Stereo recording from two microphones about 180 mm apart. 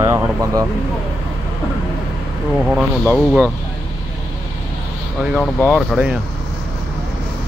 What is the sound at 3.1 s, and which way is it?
Speech, 5° right (ahead or behind).